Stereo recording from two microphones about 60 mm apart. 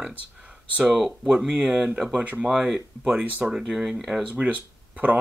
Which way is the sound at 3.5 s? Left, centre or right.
Centre.